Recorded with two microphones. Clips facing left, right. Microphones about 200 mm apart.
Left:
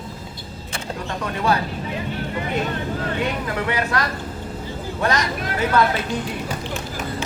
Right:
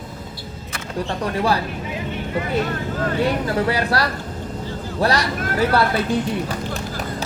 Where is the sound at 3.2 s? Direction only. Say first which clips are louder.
Right 7 dB; 35° right (ahead or behind).